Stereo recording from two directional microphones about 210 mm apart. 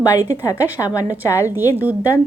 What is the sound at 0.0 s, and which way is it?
A woman's voice, 15° left (ahead or behind).